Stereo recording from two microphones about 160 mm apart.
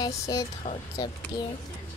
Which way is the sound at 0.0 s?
25° left (ahead or behind).